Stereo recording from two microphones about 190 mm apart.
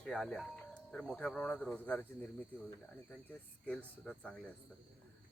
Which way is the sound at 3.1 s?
5° left (ahead or behind).